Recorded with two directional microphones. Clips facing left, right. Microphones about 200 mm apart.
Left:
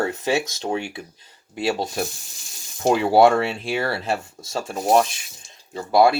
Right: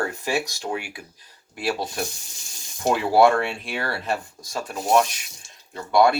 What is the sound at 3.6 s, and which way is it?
Speech, 30° left (ahead or behind).